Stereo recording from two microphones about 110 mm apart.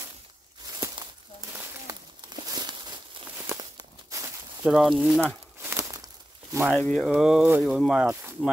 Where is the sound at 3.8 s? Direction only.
30° right (ahead or behind).